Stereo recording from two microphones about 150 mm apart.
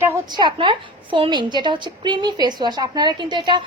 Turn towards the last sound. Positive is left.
turn(degrees=-30)  # may be behind; listen again after turning